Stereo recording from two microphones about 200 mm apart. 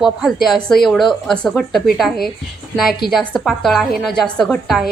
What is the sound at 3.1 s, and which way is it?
Speech, centre (ahead or behind).